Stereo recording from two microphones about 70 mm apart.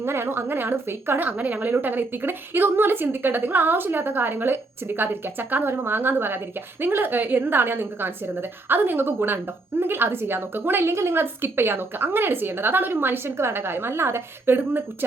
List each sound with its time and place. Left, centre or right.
0.0 s a woman's voice: right